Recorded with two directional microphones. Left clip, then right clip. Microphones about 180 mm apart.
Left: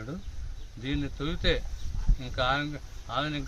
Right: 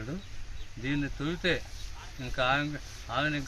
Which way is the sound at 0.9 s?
15° left (ahead or behind).